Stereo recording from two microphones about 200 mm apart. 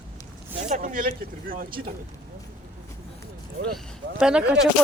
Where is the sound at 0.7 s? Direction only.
45° right (ahead or behind).